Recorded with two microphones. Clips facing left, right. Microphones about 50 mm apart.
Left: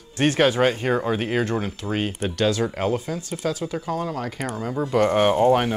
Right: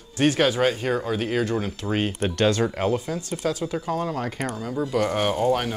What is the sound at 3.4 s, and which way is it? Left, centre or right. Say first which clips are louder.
Speech: even; centre.